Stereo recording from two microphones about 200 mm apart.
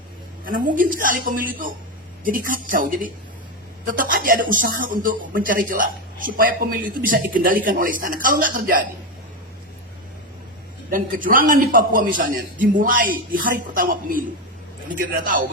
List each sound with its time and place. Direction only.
0.4 s speech: 45° right (ahead or behind)
10.9 s speech: 45° right (ahead or behind)